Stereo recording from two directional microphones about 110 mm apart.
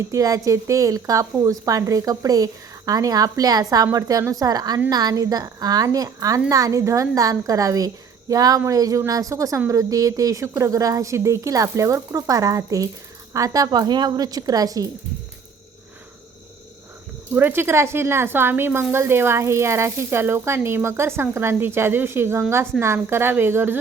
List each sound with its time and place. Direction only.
0.1 s a woman's voice: 30° right (ahead or behind)
17.3 s a woman's voice: 20° right (ahead or behind)